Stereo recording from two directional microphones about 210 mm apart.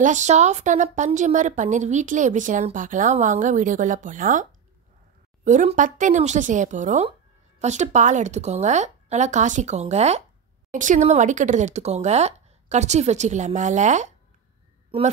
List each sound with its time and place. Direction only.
0.0 s a woman's voice: 35° right (ahead or behind)